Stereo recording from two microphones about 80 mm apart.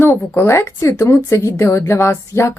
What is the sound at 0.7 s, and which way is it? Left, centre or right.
Speech, left.